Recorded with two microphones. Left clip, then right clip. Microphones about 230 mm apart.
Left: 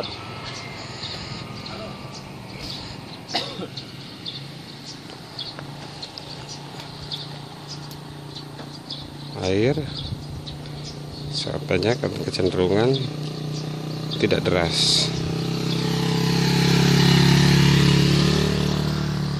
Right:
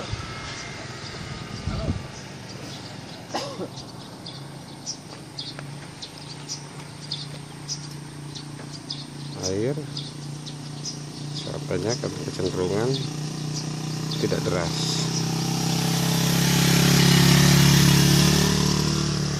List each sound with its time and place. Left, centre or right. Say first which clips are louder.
9.4 s speech: left 5 dB; left
11.7 s speech: left 5 dB; left
13.8 s a sound: left 1 dB; right
14.2 s speech: left 5 dB; left
15.0 s vehicle: even; right